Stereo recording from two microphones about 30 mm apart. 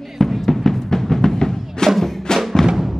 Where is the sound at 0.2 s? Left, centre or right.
Centre.